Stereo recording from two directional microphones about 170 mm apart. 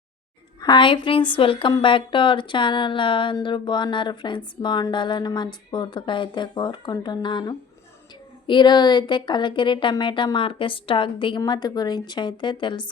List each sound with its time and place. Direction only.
0.6 s a woman's voice: 25° left (ahead or behind)